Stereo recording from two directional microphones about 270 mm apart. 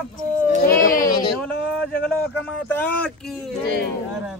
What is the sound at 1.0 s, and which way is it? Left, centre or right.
Speech, left.